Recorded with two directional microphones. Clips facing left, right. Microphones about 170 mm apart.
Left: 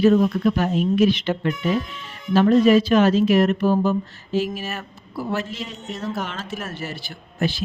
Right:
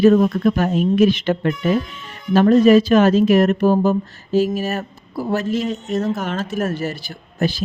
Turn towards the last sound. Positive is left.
turn(degrees=-40)  # may be behind; listen again after turning